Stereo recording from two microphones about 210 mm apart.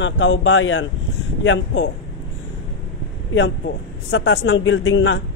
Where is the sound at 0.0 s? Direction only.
65° left (ahead or behind).